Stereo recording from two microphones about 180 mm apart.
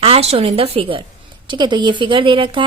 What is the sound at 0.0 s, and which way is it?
A woman's voice, 35° right (ahead or behind).